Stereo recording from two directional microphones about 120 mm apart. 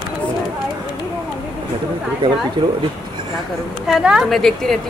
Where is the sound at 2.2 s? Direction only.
40° right (ahead or behind).